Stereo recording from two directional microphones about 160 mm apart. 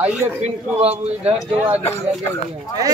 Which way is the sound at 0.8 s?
40° right (ahead or behind).